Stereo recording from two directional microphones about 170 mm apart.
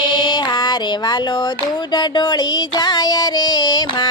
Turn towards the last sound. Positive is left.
turn(degrees=25)  # may be behind; listen again after turning